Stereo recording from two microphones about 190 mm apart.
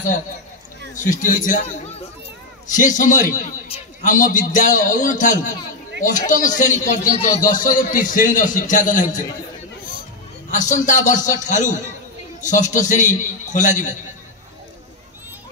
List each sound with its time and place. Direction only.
1.2 s a man's voice: 40° left (ahead or behind)
10.5 s a man's voice: 40° left (ahead or behind)